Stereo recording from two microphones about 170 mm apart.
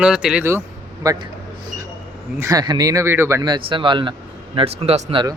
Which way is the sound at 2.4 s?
20° right (ahead or behind).